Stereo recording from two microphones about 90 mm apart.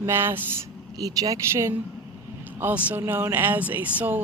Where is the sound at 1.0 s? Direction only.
45° right (ahead or behind).